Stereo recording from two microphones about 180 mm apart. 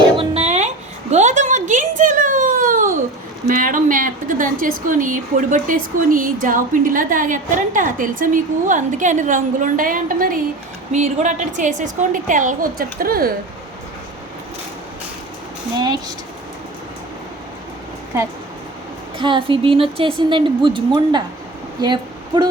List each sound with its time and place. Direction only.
0.2 s a sound: 35° right (ahead or behind)
3.4 s a woman's voice: 50° right (ahead or behind)
15.8 s speech: 25° right (ahead or behind)
19.2 s speech: 30° right (ahead or behind)